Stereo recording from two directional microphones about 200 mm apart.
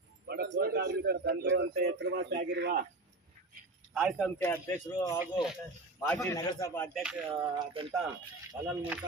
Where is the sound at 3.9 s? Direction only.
5° right (ahead or behind).